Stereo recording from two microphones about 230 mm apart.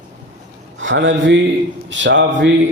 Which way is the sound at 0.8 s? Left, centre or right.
Right.